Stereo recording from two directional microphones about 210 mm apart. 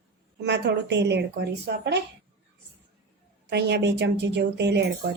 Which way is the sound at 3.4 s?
55° right (ahead or behind).